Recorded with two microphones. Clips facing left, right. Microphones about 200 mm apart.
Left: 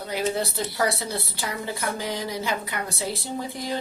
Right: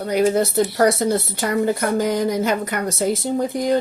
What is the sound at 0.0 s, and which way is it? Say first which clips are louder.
Speech: right 9 dB; 45° right (ahead or behind).